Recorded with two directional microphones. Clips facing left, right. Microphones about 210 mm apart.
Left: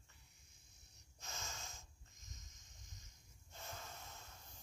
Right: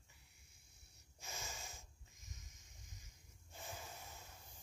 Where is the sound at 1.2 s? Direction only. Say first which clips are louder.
Right 1 dB; 15° right (ahead or behind).